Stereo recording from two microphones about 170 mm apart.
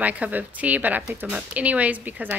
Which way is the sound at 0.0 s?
10° right (ahead or behind).